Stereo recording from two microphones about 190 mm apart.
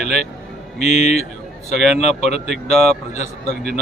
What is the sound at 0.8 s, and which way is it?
A man's voice, 35° left (ahead or behind).